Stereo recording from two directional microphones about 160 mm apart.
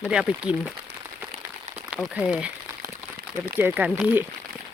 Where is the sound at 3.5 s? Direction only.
10° right (ahead or behind).